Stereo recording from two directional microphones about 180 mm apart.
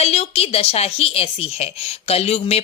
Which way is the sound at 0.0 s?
35° left (ahead or behind).